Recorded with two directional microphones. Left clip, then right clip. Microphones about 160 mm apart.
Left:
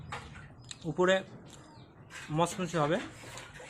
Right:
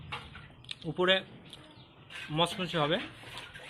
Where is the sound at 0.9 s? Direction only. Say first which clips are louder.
Even; 15° left (ahead or behind).